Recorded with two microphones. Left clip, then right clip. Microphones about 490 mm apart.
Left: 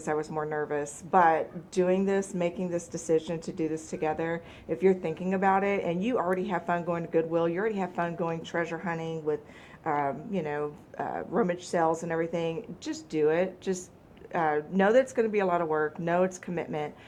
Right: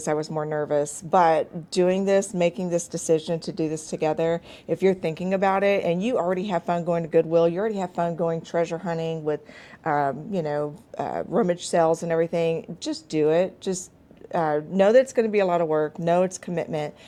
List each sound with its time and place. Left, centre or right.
0.0 s a woman's voice: right